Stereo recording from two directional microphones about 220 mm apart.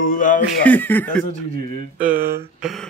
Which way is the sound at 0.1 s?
35° left (ahead or behind).